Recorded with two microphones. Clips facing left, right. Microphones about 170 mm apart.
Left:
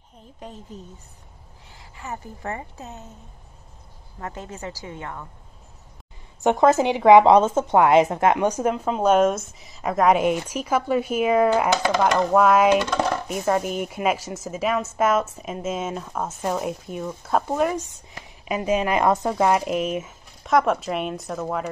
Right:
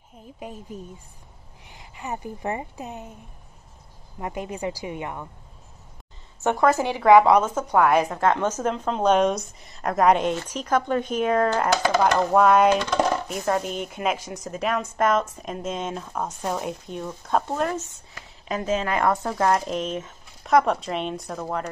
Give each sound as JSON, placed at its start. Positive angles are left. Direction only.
{"t": 0.4, "sound": "a woman's voice", "side_deg": -10}
{"t": 1.7, "sound": "a woman's voice", "side_deg": -15}
{"t": 4.2, "sound": "a woman's voice", "side_deg": -15}
{"t": 6.4, "sound": "a woman's voice", "side_deg": 20}